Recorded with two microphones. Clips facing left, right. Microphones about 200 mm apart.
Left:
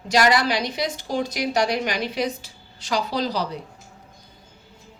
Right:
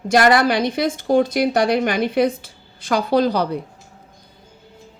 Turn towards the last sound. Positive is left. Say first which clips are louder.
# right 8 dB
turn(degrees=-55)  # may be behind; listen again after turning